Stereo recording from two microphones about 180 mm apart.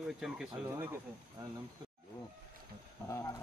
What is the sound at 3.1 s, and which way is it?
Speech, 15° left (ahead or behind).